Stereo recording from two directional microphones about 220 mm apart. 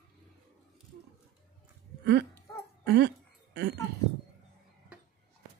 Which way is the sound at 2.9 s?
50° right (ahead or behind).